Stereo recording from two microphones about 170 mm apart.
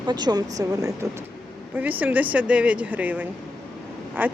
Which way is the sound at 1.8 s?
10° right (ahead or behind).